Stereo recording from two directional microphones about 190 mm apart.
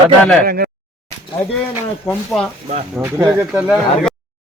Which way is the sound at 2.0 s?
5° left (ahead or behind).